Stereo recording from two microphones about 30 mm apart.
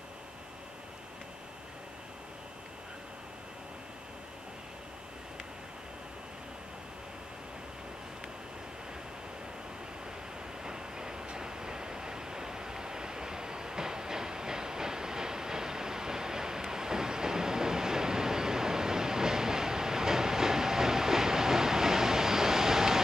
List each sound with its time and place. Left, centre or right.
10.6 s vehicle: right